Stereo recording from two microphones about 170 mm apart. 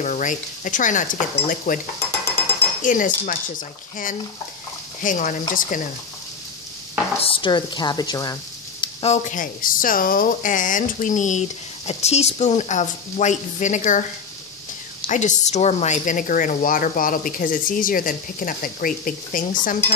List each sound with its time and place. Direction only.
0.0 s speech: 50° left (ahead or behind)
2.8 s speech: 50° left (ahead or behind)
5.0 s speech: 50° left (ahead or behind)
7.2 s speech: 30° left (ahead or behind)
8.8 s speech: 40° left (ahead or behind)
15.0 s speech: 45° left (ahead or behind)